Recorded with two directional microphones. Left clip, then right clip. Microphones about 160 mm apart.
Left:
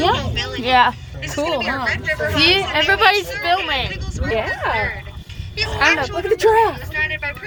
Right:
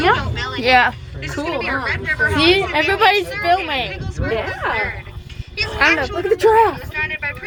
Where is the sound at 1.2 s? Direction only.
40° left (ahead or behind).